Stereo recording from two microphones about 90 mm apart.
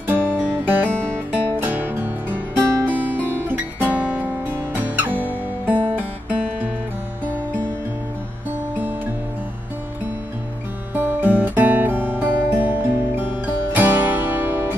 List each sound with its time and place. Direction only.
0.0 s guitar: 25° right (ahead or behind)
0.8 s music: 15° left (ahead or behind)
1.3 s music: 20° right (ahead or behind)
8.7 s music: 20° right (ahead or behind)
11.0 s music: 20° right (ahead or behind)